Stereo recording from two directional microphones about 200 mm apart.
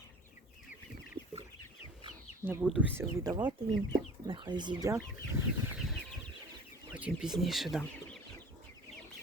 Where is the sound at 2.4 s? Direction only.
10° right (ahead or behind).